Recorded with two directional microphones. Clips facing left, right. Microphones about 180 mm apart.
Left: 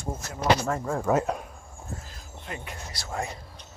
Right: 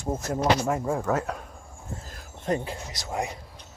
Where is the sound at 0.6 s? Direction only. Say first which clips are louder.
Right 2 dB; 15° right (ahead or behind).